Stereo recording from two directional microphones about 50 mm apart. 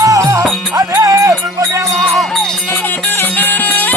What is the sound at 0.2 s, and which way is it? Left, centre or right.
Music, right.